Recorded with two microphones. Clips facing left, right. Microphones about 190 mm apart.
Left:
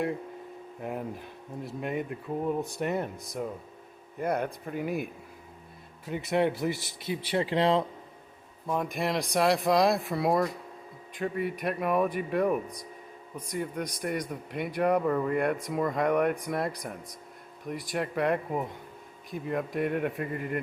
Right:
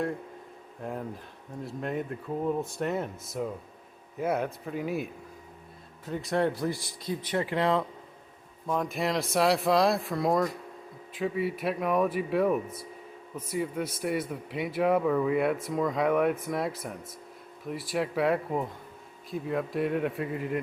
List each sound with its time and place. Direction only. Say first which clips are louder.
0.8 s speech: left 1 dB; 5° left (ahead or behind)
6.3 s a man's voice: left 1 dB; 20° left (ahead or behind)
8.6 s speech: right 1 dB; 5° left (ahead or behind)
12.6 s speech: right 1 dB; 15° left (ahead or behind)
13.3 s speech: right 2 dB; 5° right (ahead or behind)